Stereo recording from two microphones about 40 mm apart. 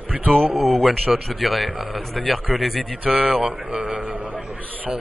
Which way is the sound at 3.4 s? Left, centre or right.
Centre.